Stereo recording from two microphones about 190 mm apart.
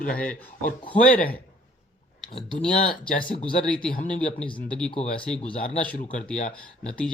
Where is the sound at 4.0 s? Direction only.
40° left (ahead or behind).